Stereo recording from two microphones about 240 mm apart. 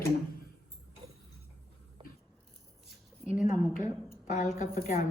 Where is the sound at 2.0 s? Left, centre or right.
Right.